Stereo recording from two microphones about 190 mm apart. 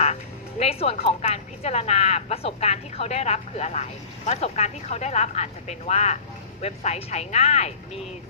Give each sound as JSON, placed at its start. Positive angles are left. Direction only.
{"t": 0.6, "sound": "a woman's voice", "side_deg": 30}